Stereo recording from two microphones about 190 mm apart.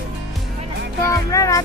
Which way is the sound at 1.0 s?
15° left (ahead or behind).